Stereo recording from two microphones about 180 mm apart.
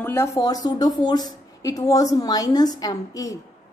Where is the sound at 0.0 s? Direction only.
15° left (ahead or behind).